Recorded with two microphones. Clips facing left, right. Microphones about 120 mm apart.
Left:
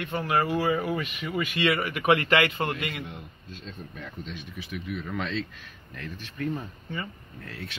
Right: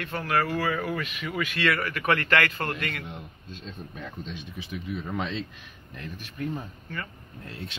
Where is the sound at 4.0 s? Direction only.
25° right (ahead or behind).